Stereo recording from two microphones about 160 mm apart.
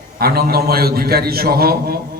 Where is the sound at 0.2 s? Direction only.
70° right (ahead or behind).